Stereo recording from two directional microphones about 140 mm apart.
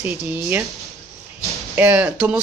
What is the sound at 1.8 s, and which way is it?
Speech, 10° right (ahead or behind).